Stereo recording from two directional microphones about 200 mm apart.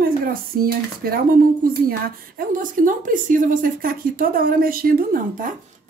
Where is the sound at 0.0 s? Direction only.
45° right (ahead or behind).